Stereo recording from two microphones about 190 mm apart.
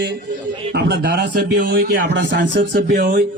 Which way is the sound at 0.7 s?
60° right (ahead or behind).